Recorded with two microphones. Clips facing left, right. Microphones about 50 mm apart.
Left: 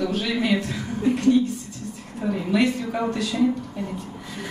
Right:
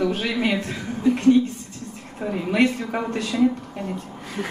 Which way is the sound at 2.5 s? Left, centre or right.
Right.